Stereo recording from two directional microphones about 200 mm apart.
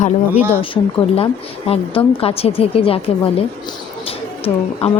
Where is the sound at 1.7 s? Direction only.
30° left (ahead or behind).